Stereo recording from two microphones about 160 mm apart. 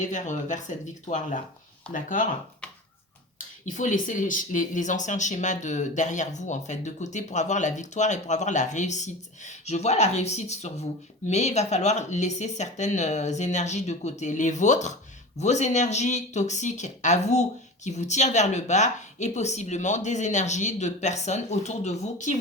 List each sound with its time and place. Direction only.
0.0 s speech: 50° left (ahead or behind)
3.3 s speech: 50° left (ahead or behind)